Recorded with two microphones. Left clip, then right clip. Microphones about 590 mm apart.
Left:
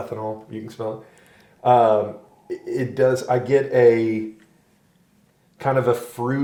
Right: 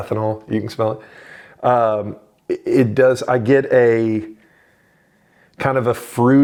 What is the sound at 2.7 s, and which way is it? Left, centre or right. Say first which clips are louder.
Speech: right 5 dB; right.